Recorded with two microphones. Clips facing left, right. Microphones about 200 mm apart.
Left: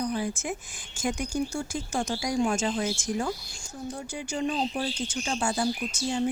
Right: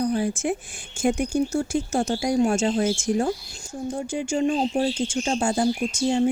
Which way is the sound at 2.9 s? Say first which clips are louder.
Right 7 dB; 25° right (ahead or behind).